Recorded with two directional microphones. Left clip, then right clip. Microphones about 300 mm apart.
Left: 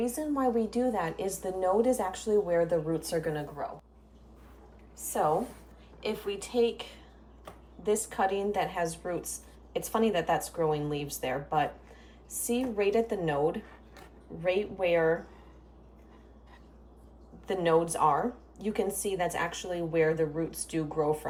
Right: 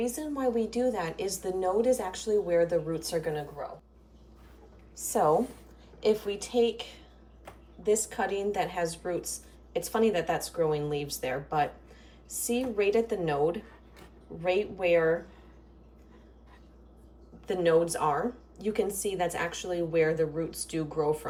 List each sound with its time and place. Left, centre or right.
0.0 s a woman's voice: centre
5.1 s speech: right
6.0 s a woman's voice: centre
17.4 s a woman's voice: centre